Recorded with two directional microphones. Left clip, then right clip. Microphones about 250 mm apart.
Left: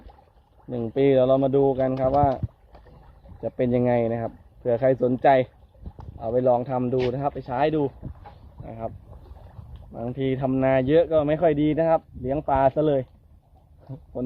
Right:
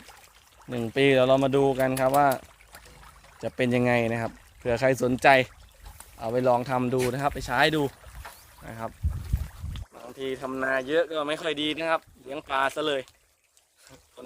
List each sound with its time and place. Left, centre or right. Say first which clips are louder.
0.9 s speech: left 1 dB; right
3.4 s speech: left 2 dB; right
10.2 s speech: left 6 dB; right